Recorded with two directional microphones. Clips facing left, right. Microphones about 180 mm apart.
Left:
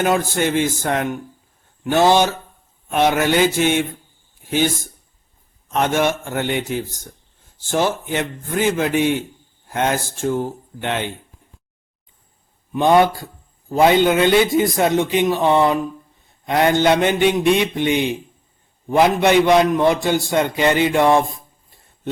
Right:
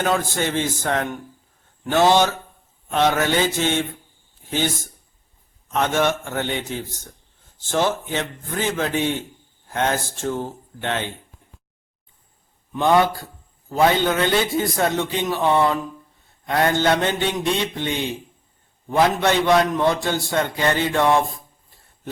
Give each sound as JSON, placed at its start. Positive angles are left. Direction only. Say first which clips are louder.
{"t": 0.0, "sound": "a man's voice", "louder": "left 4 dB", "side_deg": 15}
{"t": 5.7, "sound": "a man's voice", "louder": "left 2 dB", "side_deg": 15}
{"t": 12.7, "sound": "a man's voice", "louder": "left 3 dB", "side_deg": 20}